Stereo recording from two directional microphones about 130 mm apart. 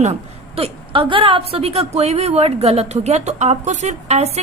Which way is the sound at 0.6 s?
45° right (ahead or behind).